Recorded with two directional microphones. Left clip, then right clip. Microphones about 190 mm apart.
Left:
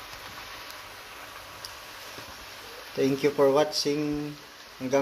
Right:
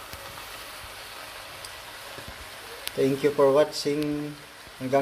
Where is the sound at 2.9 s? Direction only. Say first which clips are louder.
Right 2 dB; centre (ahead or behind).